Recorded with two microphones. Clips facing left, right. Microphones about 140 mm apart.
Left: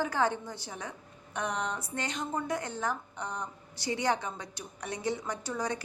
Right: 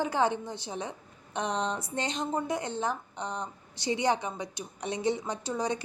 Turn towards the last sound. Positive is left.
turn(degrees=-20)  # may be behind; listen again after turning